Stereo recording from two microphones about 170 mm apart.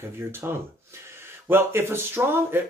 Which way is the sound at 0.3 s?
15° right (ahead or behind).